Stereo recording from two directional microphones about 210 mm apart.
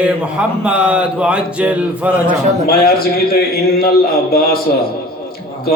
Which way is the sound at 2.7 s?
45° left (ahead or behind).